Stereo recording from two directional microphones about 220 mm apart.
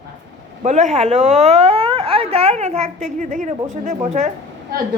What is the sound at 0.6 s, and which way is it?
Speech, 30° right (ahead or behind).